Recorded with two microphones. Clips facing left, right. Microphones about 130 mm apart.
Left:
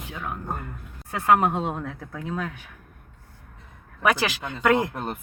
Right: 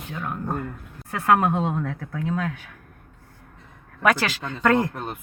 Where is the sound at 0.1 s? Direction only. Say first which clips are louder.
Right 4 dB; 10° left (ahead or behind).